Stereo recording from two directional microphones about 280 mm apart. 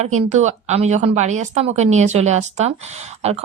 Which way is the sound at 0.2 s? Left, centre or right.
Right.